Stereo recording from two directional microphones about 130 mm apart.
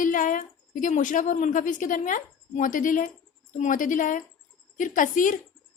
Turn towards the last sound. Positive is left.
turn(degrees=90)